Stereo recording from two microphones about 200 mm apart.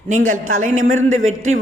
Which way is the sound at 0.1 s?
40° right (ahead or behind).